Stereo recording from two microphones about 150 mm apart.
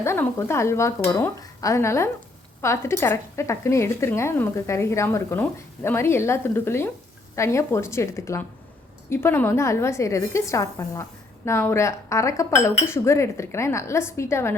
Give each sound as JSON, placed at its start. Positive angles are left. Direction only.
{"t": 0.0, "sound": "speech", "side_deg": 15}